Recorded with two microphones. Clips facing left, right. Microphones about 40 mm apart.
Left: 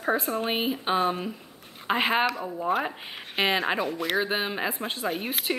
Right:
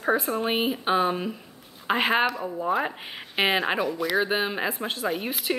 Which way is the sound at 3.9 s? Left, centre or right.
Left.